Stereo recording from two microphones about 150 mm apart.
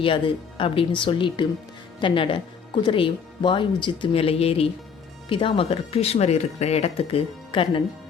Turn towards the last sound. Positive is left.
turn(degrees=35)  # may be behind; listen again after turning